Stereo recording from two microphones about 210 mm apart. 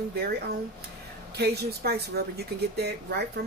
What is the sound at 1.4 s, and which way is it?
A woman's voice, 50° right (ahead or behind).